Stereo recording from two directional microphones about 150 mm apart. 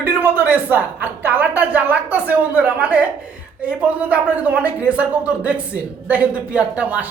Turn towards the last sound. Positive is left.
turn(degrees=-10)  # may be behind; listen again after turning